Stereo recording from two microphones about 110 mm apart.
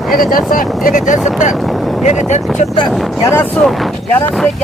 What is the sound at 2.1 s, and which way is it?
Speech, 90° left.